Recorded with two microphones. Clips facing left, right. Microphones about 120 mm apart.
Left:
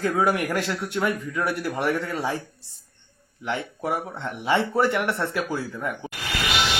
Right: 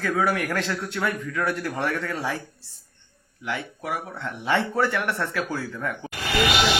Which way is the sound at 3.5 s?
25° left (ahead or behind).